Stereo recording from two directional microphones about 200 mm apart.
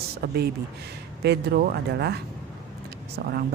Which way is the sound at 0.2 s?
55° right (ahead or behind).